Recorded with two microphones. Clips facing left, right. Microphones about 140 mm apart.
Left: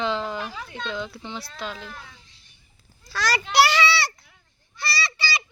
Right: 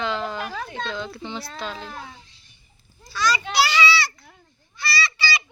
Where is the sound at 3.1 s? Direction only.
80° left; by 3.8 s 65° left (ahead or behind).